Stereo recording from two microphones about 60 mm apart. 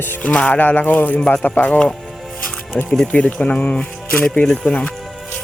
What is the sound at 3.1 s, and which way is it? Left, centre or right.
Speech, left.